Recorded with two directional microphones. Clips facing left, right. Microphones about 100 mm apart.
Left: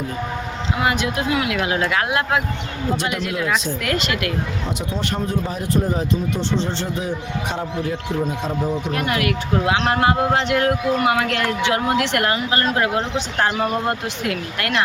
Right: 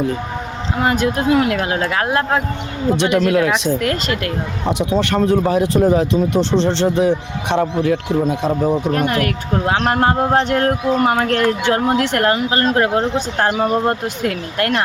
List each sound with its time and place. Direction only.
0.8 s speech: 40° right (ahead or behind)
3.2 s speech: 90° right
3.8 s speech: 40° right (ahead or behind)
4.7 s speech: 80° right
8.4 s speech: 60° right (ahead or behind)
8.9 s speech: 40° right (ahead or behind)